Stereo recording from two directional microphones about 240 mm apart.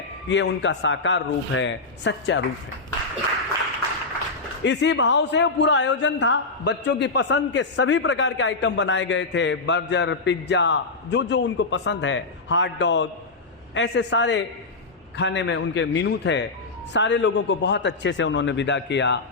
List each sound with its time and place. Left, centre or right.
0.3 s a man's voice: left
4.6 s a man's voice: left